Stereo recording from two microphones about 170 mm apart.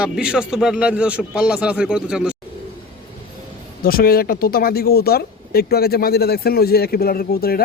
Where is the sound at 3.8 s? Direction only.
60° left (ahead or behind).